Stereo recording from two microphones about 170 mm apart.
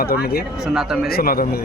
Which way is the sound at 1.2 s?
60° left (ahead or behind).